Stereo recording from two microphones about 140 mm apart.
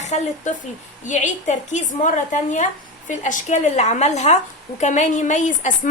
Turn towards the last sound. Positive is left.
turn(degrees=65)  # may be behind; listen again after turning